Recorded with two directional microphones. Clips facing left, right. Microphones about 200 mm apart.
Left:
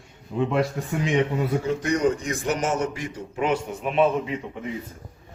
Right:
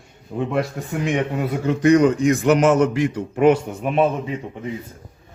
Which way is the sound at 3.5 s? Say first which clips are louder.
Right 9 dB; 50° right (ahead or behind).